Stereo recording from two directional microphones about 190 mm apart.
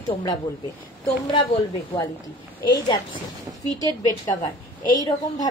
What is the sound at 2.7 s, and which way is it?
A woman's voice, 20° left (ahead or behind).